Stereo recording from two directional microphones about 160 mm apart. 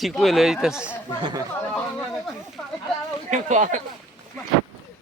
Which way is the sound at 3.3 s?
50° right (ahead or behind).